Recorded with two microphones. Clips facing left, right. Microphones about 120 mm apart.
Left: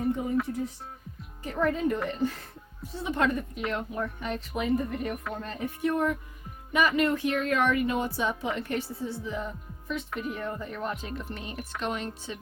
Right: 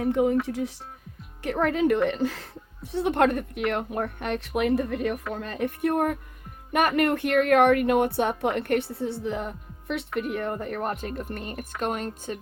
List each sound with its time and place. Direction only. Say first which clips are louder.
0.0 s speech: right 5 dB; 80° right
1.4 s a woman's voice: right 4 dB; 75° right (ahead or behind)
5.3 s a woman's voice: right 5 dB; 75° right (ahead or behind); by 12.4 s 50° right (ahead or behind)